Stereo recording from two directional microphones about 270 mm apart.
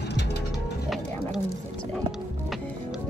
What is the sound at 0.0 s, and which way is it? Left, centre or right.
Music, left.